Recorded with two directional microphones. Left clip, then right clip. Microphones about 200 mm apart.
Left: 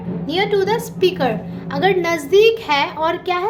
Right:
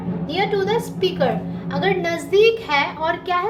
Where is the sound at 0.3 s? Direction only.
40° left (ahead or behind).